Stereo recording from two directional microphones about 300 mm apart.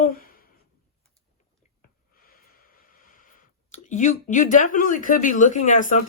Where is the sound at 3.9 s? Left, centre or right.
Left.